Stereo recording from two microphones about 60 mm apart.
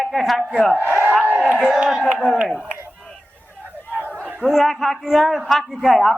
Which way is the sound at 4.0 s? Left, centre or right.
Right.